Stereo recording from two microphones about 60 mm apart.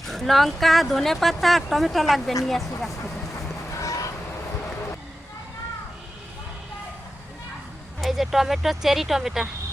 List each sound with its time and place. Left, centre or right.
0.0 s speech: centre
3.7 s vehicle: left
8.0 s speech: centre